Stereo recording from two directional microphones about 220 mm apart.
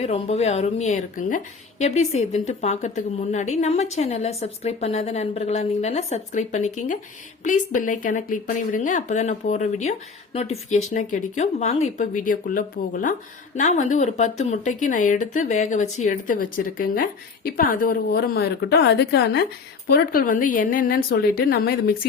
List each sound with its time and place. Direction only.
0.0 s a woman's voice: 30° left (ahead or behind)